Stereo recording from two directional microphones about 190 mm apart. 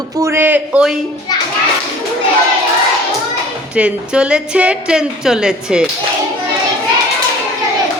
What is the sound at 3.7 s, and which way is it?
A woman's voice, 5° right (ahead or behind).